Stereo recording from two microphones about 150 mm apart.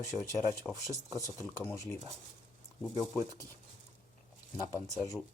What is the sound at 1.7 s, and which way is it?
Speech, 20° left (ahead or behind).